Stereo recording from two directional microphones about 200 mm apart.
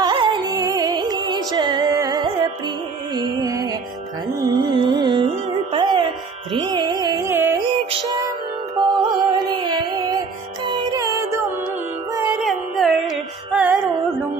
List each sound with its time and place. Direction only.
0.0 s music: 25° right (ahead or behind)
6.5 s carnatic music: 20° right (ahead or behind)
7.6 s music: 25° right (ahead or behind)
12.4 s music: centre (ahead or behind)